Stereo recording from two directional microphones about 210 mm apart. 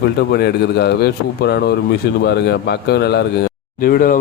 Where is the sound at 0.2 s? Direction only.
50° left (ahead or behind).